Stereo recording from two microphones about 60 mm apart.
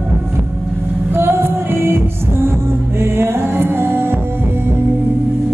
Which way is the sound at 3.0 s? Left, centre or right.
Right.